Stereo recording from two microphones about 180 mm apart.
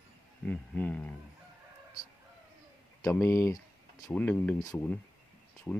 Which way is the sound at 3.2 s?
15° left (ahead or behind).